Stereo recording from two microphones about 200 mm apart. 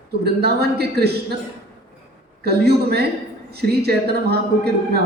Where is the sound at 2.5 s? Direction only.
55° right (ahead or behind).